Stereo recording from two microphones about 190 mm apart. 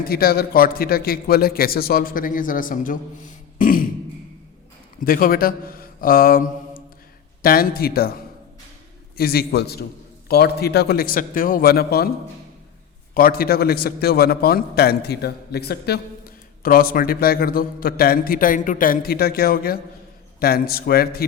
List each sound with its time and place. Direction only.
0.0 s a man's voice: 55° left (ahead or behind)
4.9 s a man's voice: 50° left (ahead or behind)
13.1 s a man's voice: 50° left (ahead or behind)